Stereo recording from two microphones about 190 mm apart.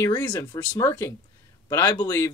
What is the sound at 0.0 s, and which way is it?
Speech, 15° left (ahead or behind).